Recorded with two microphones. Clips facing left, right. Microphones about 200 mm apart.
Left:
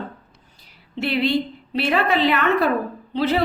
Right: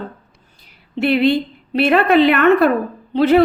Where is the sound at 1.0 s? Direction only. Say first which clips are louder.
Right 6 dB; 55° right (ahead or behind).